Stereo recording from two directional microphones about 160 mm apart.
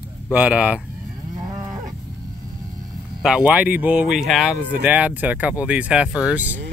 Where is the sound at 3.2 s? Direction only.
5° right (ahead or behind).